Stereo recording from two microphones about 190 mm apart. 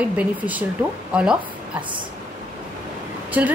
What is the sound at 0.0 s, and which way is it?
A woman's voice, 10° right (ahead or behind).